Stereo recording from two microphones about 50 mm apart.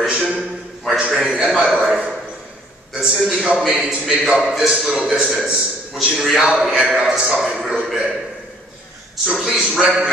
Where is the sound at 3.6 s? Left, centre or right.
Centre.